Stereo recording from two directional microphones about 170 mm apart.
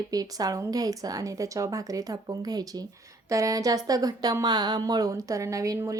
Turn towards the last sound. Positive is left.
turn(degrees=-20)  # may be behind; listen again after turning